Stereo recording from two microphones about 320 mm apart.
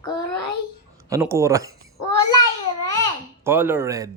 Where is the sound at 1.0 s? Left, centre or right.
Centre.